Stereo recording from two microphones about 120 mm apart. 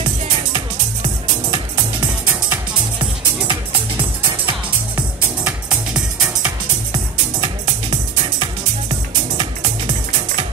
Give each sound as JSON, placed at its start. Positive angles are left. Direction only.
{"t": 3.4, "sound": "music", "side_deg": -45}
{"t": 6.9, "sound": "music", "side_deg": -40}